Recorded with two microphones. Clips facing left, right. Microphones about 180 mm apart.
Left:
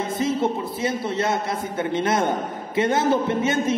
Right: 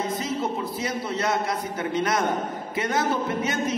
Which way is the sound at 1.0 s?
25° left (ahead or behind).